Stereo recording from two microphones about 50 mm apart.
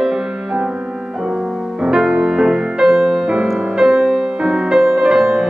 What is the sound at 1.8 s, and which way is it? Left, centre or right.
Music, centre.